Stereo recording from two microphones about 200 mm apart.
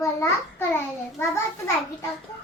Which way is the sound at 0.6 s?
10° left (ahead or behind).